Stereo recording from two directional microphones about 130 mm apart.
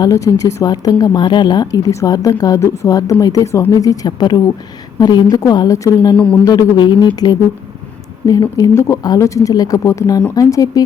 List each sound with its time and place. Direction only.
0.0 s a woman's voice: 25° left (ahead or behind)
8.3 s speech: 30° left (ahead or behind)